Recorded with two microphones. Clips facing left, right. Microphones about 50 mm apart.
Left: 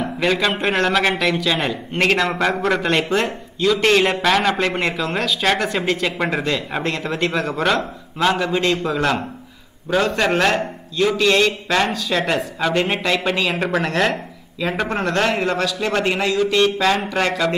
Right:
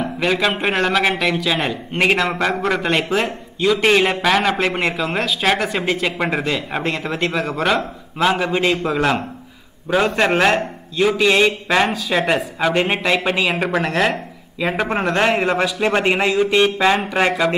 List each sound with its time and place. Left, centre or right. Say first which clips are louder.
0.0 s a man's voice: even; centre
14.6 s a man's voice: right 2 dB; centre